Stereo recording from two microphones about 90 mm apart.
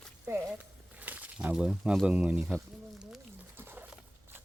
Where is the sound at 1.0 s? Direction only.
20° right (ahead or behind).